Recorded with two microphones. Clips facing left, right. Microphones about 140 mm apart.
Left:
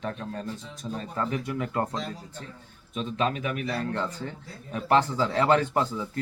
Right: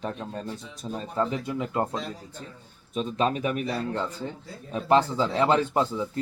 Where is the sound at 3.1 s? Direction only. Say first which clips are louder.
Right 2 dB; 35° right (ahead or behind).